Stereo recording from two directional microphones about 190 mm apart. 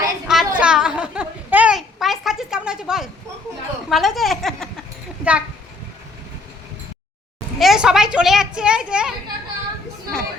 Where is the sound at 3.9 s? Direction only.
Centre (ahead or behind).